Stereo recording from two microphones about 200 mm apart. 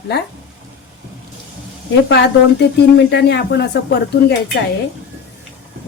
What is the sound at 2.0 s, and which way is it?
A woman's voice, 60° left (ahead or behind).